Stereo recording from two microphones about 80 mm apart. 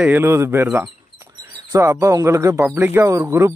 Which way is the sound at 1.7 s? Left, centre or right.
Right.